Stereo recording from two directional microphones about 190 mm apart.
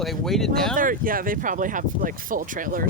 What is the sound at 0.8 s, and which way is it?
Speech, 45° right (ahead or behind).